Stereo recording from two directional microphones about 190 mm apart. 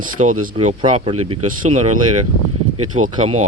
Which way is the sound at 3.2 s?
35° right (ahead or behind).